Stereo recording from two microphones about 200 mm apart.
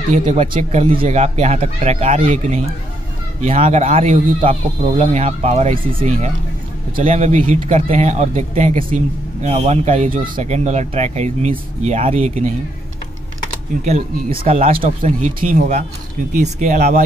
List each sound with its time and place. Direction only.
0.1 s speech: 40° right (ahead or behind)
13.8 s speech: 35° right (ahead or behind)
14.7 s speech: 40° right (ahead or behind)